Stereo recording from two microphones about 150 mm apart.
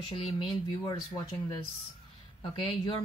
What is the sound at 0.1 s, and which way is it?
Speech, 35° left (ahead or behind).